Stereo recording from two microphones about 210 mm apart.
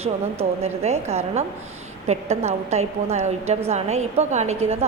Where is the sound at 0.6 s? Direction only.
30° right (ahead or behind).